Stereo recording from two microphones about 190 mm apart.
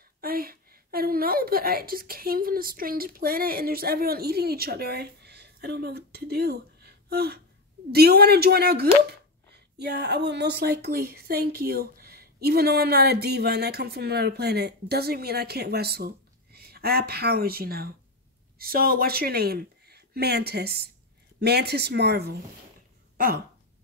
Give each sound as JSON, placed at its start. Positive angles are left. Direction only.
{"t": 0.2, "sound": "a woman's voice", "side_deg": -50}